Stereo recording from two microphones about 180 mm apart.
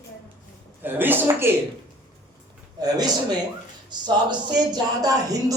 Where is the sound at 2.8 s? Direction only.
20° right (ahead or behind).